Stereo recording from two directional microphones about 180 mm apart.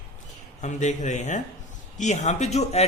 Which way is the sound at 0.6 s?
40° left (ahead or behind).